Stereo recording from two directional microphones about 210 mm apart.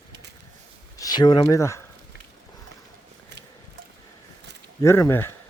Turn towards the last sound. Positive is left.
turn(degrees=10)  # may be behind; listen again after turning